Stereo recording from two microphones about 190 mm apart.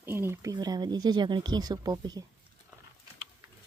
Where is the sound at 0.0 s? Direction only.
10° right (ahead or behind).